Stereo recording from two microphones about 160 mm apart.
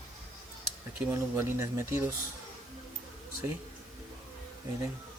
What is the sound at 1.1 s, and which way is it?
Speech, 15° right (ahead or behind).